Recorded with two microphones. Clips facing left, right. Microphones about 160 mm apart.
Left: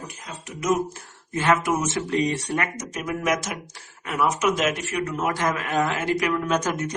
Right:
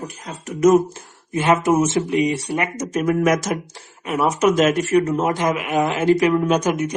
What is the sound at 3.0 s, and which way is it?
Speech, 45° right (ahead or behind).